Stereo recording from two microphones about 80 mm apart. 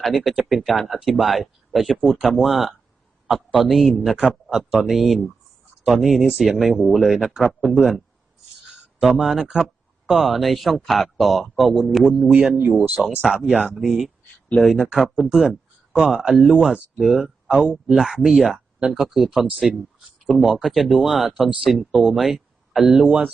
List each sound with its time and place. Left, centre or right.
0.0 s speech: centre
3.2 s a sound: centre
3.7 s speech: centre
9.0 s speech: centre
12.2 s speech: centre
13.2 s speech: centre
23.0 s speech: centre